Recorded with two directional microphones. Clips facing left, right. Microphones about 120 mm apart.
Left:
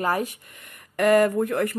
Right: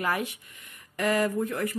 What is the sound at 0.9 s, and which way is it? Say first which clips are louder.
Speech: left 7 dB; 60° left (ahead or behind).